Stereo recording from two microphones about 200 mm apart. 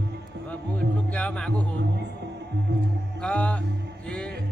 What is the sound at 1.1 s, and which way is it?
Speech, 5° left (ahead or behind).